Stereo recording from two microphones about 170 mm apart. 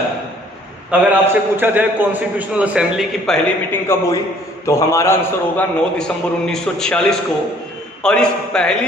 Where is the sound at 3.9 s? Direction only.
15° left (ahead or behind).